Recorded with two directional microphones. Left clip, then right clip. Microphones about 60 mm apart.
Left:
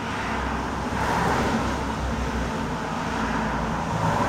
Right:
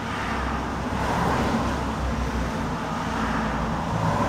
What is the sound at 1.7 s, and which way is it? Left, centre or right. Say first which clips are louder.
Vehicle: even; centre.